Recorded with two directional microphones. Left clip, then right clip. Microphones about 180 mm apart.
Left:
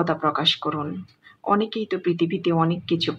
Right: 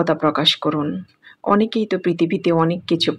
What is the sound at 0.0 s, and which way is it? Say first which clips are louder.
Speech: right 4 dB; 35° right (ahead or behind).